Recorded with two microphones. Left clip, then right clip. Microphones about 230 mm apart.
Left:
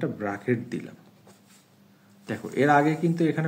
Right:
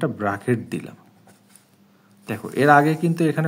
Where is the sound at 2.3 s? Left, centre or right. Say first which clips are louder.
Right 6 dB; right.